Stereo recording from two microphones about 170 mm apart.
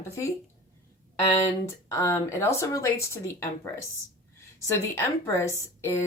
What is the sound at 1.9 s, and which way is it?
A woman's voice, 15° left (ahead or behind).